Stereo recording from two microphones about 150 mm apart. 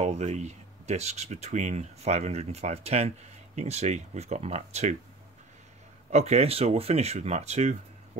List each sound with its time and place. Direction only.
0.0 s speech: 45° right (ahead or behind)
6.1 s speech: 45° right (ahead or behind)